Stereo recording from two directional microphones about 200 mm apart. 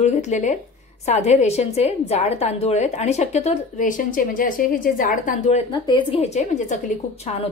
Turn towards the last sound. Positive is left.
turn(degrees=35)  # may be behind; listen again after turning